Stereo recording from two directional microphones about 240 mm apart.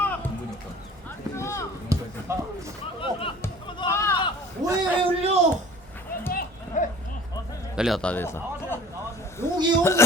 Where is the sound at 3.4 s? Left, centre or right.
Centre.